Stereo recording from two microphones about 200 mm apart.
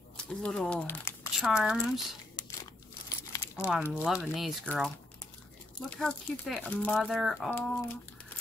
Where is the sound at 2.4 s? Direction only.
20° left (ahead or behind).